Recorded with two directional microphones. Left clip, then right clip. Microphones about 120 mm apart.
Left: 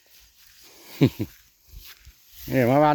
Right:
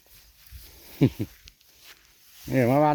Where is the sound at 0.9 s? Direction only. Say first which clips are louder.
Left 2 dB; 50° left (ahead or behind).